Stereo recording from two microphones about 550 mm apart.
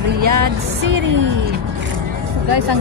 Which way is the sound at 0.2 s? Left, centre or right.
Right.